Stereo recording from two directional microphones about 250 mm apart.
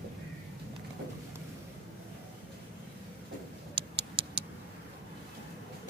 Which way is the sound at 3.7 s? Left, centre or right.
Right.